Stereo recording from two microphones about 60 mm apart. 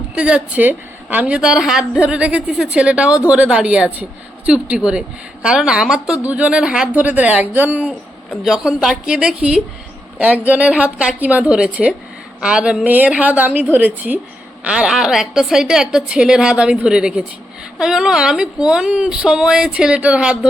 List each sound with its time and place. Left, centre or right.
0.2 s a woman's voice: right
1.4 s a woman's voice: centre
6.2 s a woman's voice: right
6.8 s a woman's voice: right
8.4 s a woman's voice: centre
12.8 s a woman's voice: right
14.6 s a woman's voice: centre